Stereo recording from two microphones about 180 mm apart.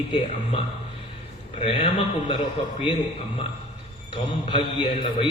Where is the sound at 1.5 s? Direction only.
30° left (ahead or behind).